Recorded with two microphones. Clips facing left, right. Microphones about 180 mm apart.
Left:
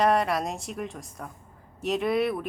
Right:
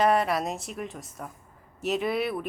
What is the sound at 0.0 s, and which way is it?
A woman's voice, centre (ahead or behind).